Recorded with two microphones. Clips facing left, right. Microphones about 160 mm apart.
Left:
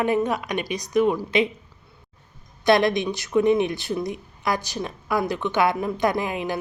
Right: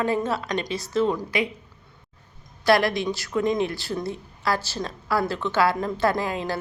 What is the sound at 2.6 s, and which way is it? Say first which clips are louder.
A woman's voice: left 2 dB; 20° left (ahead or behind).